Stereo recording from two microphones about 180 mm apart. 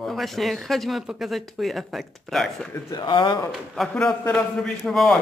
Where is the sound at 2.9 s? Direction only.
25° left (ahead or behind).